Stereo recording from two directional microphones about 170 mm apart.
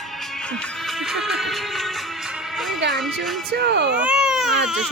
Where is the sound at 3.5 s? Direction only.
80° right.